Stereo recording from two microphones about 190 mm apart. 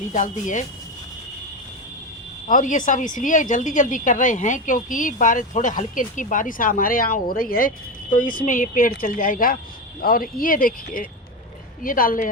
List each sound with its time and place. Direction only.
0.1 s speech: 40° left (ahead or behind)
2.5 s a woman's voice: 45° left (ahead or behind)